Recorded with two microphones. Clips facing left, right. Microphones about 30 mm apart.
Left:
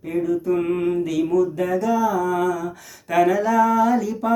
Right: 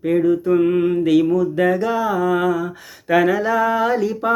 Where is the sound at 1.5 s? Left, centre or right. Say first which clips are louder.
Right 3 dB; right.